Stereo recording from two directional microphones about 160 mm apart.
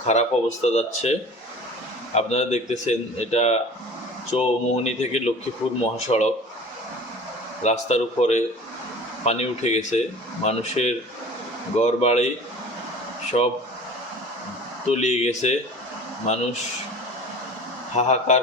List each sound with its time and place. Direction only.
0.1 s speech: 45° left (ahead or behind)
2.1 s a man's voice: 45° left (ahead or behind)
7.6 s speech: 45° left (ahead or behind)
11.9 s speech: 40° left (ahead or behind)
13.3 s a man's voice: 40° left (ahead or behind)
14.8 s speech: 45° left (ahead or behind)
17.9 s speech: 45° left (ahead or behind)